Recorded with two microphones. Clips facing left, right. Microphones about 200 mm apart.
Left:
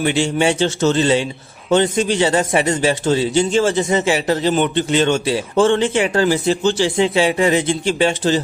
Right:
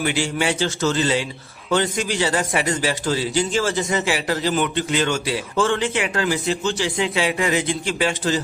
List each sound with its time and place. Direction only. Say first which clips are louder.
0.0 s a man's voice: left 5 dB; 25° left (ahead or behind)